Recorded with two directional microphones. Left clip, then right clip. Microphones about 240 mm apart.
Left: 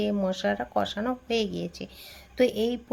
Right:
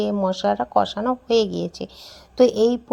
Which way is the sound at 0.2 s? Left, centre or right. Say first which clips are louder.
Right 7 dB; centre.